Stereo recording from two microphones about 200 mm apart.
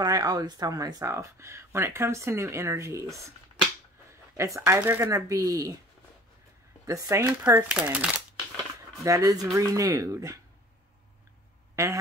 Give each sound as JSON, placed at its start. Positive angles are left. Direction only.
{"t": 0.0, "sound": "speech", "side_deg": -15}
{"t": 4.4, "sound": "speech", "side_deg": -15}
{"t": 6.9, "sound": "speech", "side_deg": -15}
{"t": 11.7, "sound": "speech", "side_deg": -15}